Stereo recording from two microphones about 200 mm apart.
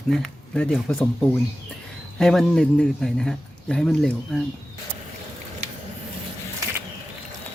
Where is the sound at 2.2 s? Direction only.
Centre (ahead or behind).